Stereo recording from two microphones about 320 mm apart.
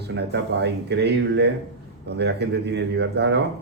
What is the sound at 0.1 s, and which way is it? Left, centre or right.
Speech, right.